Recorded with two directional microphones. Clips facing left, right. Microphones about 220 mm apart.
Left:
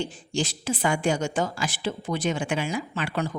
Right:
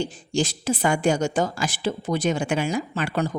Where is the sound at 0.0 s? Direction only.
40° right (ahead or behind).